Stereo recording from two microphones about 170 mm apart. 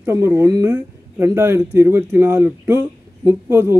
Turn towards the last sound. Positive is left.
turn(degrees=-15)  # may be behind; listen again after turning